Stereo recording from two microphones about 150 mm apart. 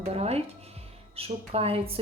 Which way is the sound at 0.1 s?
45° right (ahead or behind).